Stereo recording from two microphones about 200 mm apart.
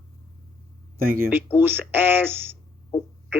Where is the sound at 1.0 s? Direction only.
45° right (ahead or behind).